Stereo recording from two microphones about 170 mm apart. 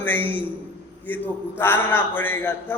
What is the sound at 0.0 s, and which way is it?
A man's voice, 10° left (ahead or behind).